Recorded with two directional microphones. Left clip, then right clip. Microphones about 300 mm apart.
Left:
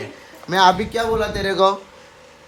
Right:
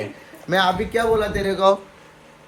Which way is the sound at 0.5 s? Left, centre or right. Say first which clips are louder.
Left 4 dB; centre.